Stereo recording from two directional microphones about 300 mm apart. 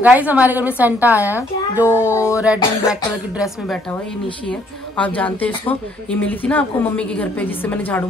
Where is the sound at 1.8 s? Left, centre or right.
Centre.